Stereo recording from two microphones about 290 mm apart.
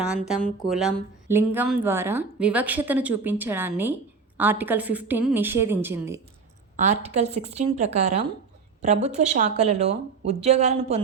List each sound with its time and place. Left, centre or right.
0.0 s a woman's voice: centre
6.7 s speech: right